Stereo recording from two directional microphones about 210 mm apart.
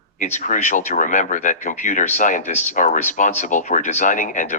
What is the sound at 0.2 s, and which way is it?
Speech, 35° left (ahead or behind).